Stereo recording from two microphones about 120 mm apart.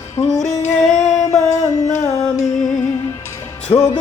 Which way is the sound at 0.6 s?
75° left (ahead or behind).